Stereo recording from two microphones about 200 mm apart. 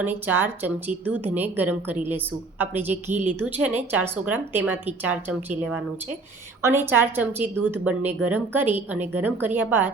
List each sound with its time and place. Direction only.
0.0 s a woman's voice: 10° right (ahead or behind)
3.1 s a woman's voice: 40° right (ahead or behind)
3.3 s a woman's voice: 10° right (ahead or behind)
6.6 s a woman's voice: 10° right (ahead or behind)